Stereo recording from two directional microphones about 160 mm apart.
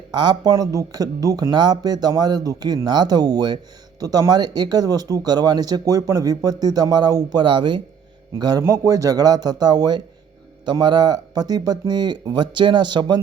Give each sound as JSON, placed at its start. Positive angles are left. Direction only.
{"t": 0.1, "sound": "speech", "side_deg": -30}